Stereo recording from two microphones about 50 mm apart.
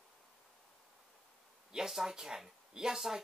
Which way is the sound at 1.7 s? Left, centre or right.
Centre.